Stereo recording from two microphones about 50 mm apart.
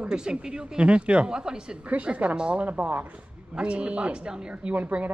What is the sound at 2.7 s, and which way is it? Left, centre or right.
Speech, right.